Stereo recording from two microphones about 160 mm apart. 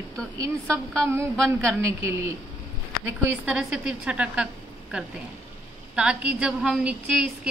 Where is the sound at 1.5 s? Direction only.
15° right (ahead or behind).